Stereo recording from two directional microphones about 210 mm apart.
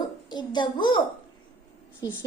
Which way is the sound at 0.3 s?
20° left (ahead or behind).